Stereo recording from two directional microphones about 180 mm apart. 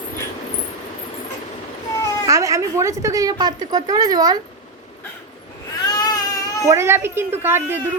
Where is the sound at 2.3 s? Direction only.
20° right (ahead or behind).